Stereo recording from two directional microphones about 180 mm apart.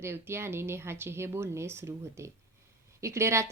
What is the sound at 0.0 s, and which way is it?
Speech, 15° right (ahead or behind).